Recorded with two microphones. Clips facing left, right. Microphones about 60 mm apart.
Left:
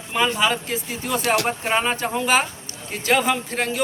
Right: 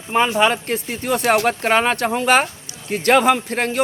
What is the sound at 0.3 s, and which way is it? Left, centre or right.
A man's voice, right.